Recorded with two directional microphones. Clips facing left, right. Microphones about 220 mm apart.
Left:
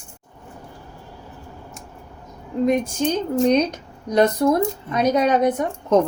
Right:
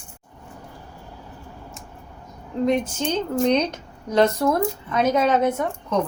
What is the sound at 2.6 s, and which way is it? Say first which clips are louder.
A woman's voice: left 2 dB; 10° left (ahead or behind).